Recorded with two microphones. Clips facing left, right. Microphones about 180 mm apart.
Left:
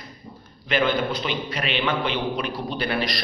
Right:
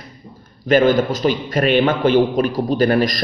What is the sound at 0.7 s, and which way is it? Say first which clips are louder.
Speech: right 9 dB; 45° right (ahead or behind).